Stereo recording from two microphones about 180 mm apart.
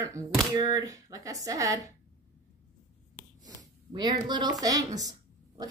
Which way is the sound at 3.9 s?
25° right (ahead or behind).